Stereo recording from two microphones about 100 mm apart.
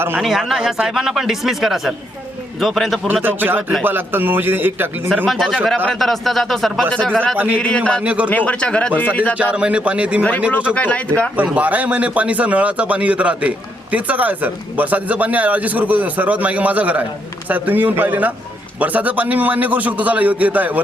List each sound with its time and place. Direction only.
0.2 s speech: centre (ahead or behind)
3.2 s a man's voice: 20° right (ahead or behind)
5.0 s speech: 5° left (ahead or behind)
8.0 s speech: 10° right (ahead or behind)
8.3 s speech: 15° left (ahead or behind)
9.3 s speech: 10° right (ahead or behind)
10.8 s speech: 15° left (ahead or behind)
11.3 s speech: 15° right (ahead or behind)